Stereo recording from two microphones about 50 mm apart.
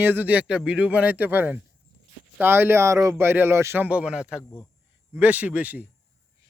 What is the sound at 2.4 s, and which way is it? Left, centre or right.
Speech, right.